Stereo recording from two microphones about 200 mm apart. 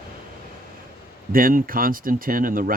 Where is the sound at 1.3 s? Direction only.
45° right (ahead or behind).